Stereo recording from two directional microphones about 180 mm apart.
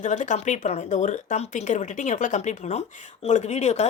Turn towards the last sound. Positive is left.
turn(degrees=40)  # may be behind; listen again after turning